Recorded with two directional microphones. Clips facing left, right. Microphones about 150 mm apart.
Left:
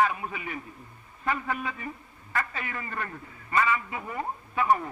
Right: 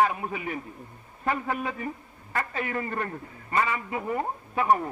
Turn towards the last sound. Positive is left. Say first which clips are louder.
# right 1 dB
turn(degrees=-35)  # may be behind; listen again after turning